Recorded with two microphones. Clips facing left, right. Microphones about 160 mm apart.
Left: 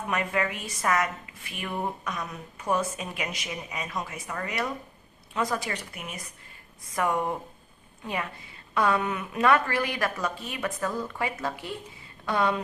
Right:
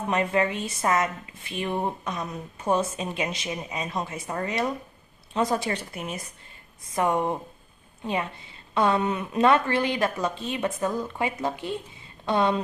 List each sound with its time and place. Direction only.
0.1 s a woman's voice: 25° right (ahead or behind)